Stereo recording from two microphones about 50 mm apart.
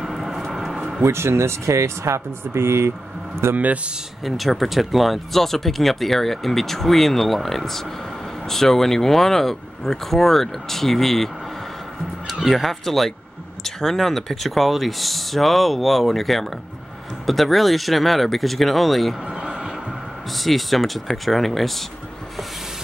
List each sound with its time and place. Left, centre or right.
0.0 s vehicle: centre
1.0 s speech: right
3.5 s speech: right
4.2 s speech: centre
12.4 s speech: centre
19.2 s a sound: centre
20.3 s speech: centre